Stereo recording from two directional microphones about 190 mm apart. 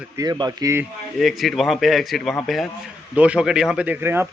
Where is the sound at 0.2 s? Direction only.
20° right (ahead or behind).